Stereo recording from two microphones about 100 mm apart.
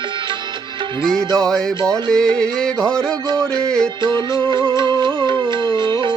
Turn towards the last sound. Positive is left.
turn(degrees=-55)  # may be behind; listen again after turning